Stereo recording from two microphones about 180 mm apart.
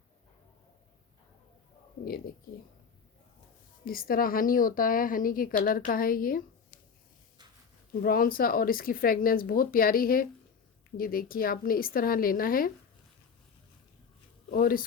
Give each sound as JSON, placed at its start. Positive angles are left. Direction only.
{"t": 3.8, "sound": "a woman's voice", "side_deg": 55}
{"t": 8.0, "sound": "a woman's voice", "side_deg": 55}
{"t": 14.5, "sound": "a woman's voice", "side_deg": 55}